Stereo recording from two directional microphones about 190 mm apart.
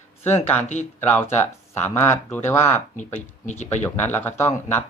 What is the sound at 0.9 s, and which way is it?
Speech, 10° left (ahead or behind).